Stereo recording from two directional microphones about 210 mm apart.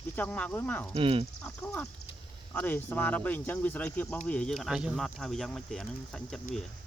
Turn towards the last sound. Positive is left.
turn(degrees=5)  # may be behind; listen again after turning